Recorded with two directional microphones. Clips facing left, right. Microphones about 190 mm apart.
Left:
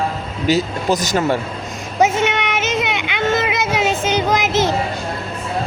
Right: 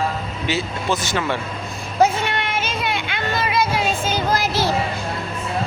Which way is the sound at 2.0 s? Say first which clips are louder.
Left 2 dB; 20° left (ahead or behind).